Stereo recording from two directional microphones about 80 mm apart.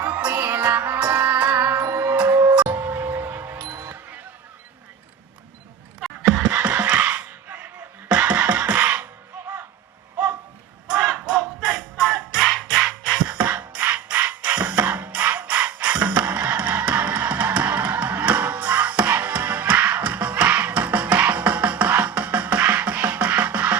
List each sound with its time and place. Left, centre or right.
0.0 s music: centre
1.8 s music: right
2.1 s music: right
6.0 s a sound: centre
6.5 s music: centre
10.9 s music: centre